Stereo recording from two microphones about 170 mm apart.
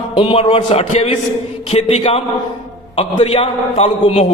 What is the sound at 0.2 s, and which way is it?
A man's voice, 30° left (ahead or behind).